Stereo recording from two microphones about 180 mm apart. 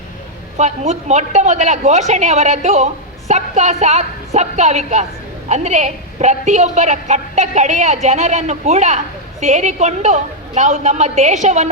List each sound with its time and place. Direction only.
0.5 s a woman's voice: 40° right (ahead or behind)